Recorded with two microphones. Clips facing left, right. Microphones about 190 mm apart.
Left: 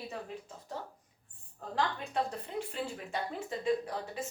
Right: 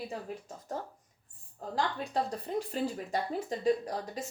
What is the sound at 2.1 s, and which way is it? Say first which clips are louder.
Speech: right 3 dB; 35° right (ahead or behind).